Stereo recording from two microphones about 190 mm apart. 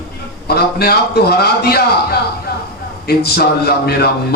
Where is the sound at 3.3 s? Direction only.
55° left (ahead or behind).